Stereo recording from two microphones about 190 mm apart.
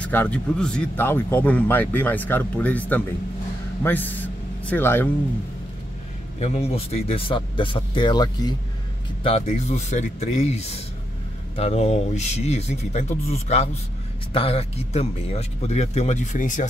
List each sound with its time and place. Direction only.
0.0 s a man's voice: 10° left (ahead or behind)
6.4 s speech: 35° left (ahead or behind)
9.2 s speech: 35° left (ahead or behind)